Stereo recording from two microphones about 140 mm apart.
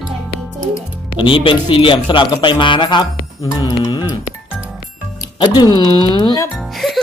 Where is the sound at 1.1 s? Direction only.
40° left (ahead or behind).